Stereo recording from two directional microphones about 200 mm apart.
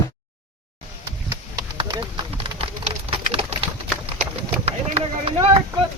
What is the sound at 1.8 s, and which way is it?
Pigeon, 25° right (ahead or behind).